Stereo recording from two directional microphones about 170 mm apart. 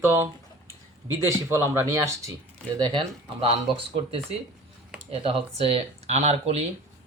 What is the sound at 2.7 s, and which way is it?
Speech, 30° right (ahead or behind).